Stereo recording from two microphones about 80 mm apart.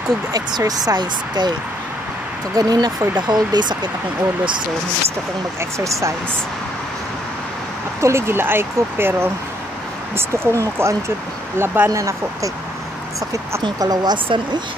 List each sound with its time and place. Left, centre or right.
0.3 s speech: right
2.5 s speech: right
5.6 s speech: right
8.0 s speech: right
11.5 s speech: right
11.9 s speech: right
14.1 s speech: right